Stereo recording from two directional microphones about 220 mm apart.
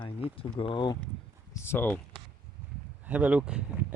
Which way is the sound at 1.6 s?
10° left (ahead or behind).